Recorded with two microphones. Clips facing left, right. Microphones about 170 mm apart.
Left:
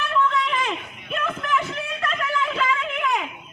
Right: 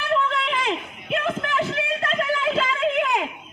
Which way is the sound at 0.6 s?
30° right (ahead or behind).